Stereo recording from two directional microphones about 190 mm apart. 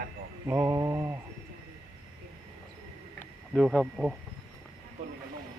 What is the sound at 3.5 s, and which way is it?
Speech, centre (ahead or behind).